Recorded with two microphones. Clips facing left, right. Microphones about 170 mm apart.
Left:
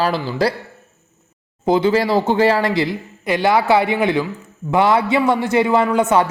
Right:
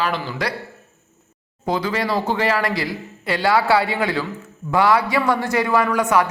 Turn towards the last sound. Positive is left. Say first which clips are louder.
# left 3 dB
turn(degrees=25)  # may be behind; listen again after turning